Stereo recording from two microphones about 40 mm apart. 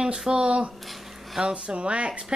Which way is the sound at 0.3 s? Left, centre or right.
Right.